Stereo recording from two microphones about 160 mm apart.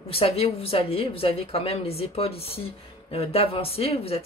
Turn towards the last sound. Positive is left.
turn(degrees=35)  # may be behind; listen again after turning